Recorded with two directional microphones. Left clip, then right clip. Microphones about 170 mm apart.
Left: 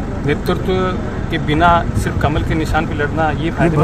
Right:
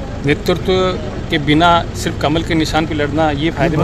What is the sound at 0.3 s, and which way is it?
Speech, 40° right (ahead or behind).